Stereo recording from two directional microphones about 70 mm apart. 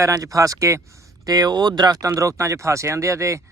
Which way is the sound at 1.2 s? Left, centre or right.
Right.